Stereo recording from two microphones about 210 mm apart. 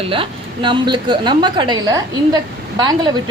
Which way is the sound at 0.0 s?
25° right (ahead or behind).